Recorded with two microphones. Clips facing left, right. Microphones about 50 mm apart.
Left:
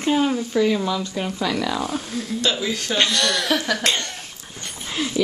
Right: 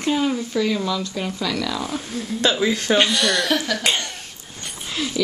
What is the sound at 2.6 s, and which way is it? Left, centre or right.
Speech, right.